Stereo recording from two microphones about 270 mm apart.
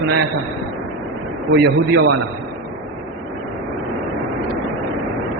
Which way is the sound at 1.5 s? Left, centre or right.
Right.